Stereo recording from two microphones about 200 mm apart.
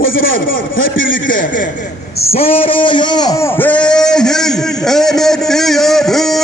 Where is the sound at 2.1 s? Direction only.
30° left (ahead or behind); by 6.4 s centre (ahead or behind).